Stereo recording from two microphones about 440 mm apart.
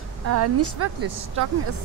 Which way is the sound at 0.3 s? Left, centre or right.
Right.